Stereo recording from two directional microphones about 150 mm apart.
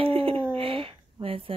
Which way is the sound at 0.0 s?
40° right (ahead or behind).